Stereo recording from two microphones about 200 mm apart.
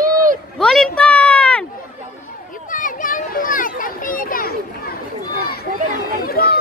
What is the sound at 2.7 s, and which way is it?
Children playing, 40° left (ahead or behind).